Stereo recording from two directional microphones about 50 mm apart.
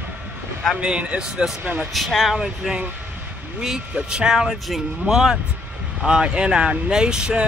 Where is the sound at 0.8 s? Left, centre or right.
Right.